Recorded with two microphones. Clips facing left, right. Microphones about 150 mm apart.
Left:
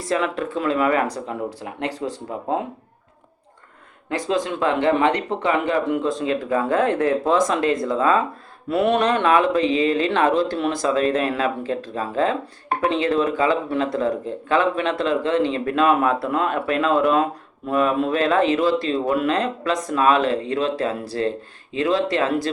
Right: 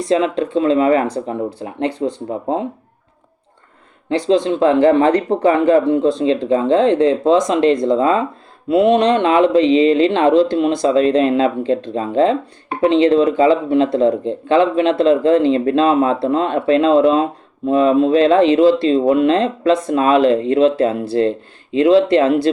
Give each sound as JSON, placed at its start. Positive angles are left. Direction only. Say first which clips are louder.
{"t": 0.0, "sound": "speech", "louder": "right 7 dB", "side_deg": -25}
{"t": 4.3, "sound": "speech", "louder": "right 8 dB", "side_deg": -30}